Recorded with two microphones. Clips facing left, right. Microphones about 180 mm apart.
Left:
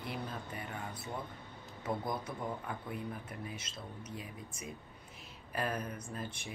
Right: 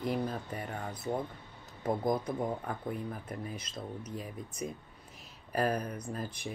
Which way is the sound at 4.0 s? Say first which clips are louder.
Right 5 dB; 40° right (ahead or behind).